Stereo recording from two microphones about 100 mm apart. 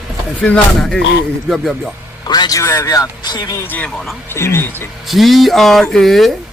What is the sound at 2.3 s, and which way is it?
Speech, 40° left (ahead or behind).